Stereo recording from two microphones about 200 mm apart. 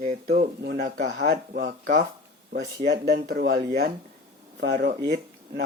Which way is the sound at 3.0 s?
50° right (ahead or behind).